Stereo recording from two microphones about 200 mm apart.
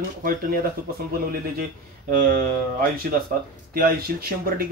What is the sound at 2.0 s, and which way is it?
Speech, 45° right (ahead or behind).